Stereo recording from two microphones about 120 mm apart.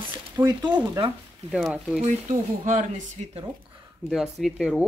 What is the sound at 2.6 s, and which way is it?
Speech, 90° right.